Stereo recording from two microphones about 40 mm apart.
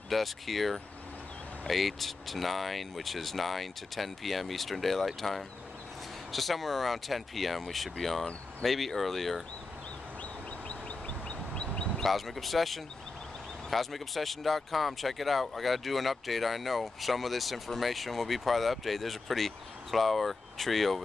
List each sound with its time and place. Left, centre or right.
0.1 s speech: centre
10.7 s bird: left
11.9 s speech: centre